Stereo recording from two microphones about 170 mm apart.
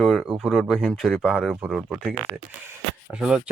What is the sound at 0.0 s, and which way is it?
Speech, centre (ahead or behind).